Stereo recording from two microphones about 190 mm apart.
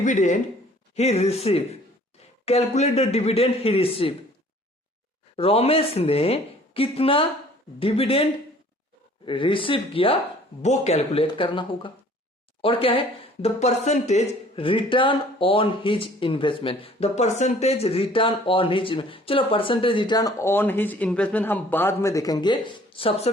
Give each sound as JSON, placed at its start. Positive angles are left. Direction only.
{"t": 0.0, "sound": "a woman's voice", "side_deg": 40}
{"t": 5.4, "sound": "a woman's voice", "side_deg": 30}